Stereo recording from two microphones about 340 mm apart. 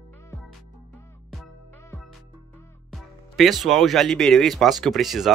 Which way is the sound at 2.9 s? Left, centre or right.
Centre.